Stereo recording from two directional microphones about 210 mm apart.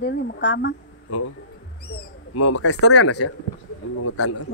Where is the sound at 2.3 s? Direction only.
90° left.